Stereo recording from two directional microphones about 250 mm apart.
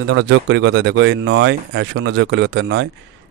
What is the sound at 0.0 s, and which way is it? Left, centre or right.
Speech, right.